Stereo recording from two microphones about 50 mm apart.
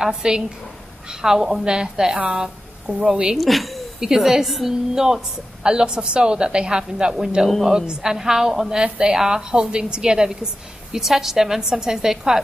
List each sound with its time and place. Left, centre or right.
0.0 s a woman's voice: centre
3.3 s a woman's voice: centre
7.4 s a woman's voice: centre